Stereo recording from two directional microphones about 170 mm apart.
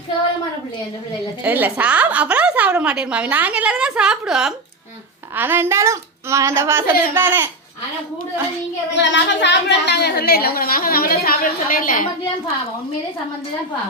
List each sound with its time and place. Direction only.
1.5 s a woman's voice: 10° right (ahead or behind)
8.9 s a woman's voice: 90° left; by 12.0 s 55° left (ahead or behind)